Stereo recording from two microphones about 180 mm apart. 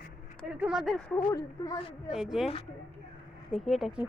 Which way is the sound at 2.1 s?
Centre (ahead or behind).